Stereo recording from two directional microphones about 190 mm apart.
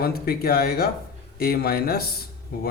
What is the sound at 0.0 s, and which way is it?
Speech, 55° left (ahead or behind).